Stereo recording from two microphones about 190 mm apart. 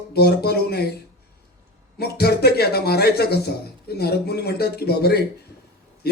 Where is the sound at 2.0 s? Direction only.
55° left (ahead or behind).